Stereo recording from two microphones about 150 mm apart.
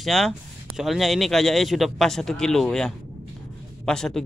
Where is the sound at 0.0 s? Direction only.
Centre (ahead or behind).